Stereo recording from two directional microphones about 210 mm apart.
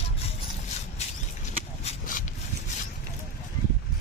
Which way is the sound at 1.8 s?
35° left (ahead or behind).